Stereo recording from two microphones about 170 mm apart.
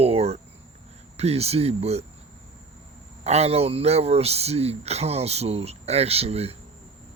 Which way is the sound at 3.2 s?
40° right (ahead or behind).